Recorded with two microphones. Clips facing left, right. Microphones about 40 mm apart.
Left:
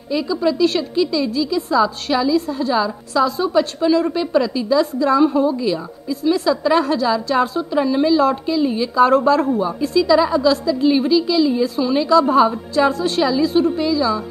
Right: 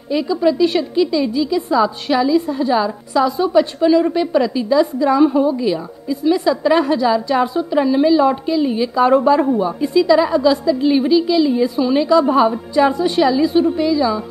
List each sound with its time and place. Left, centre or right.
0.1 s a woman's voice: right
5.2 s a woman's voice: centre
5.5 s a woman's voice: centre
7.2 s a woman's voice: centre
9.8 s a woman's voice: right